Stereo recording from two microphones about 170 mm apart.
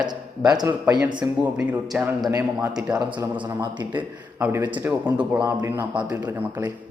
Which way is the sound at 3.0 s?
25° right (ahead or behind).